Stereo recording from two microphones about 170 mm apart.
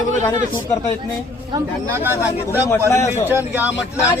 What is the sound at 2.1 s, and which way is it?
Speech, 15° left (ahead or behind).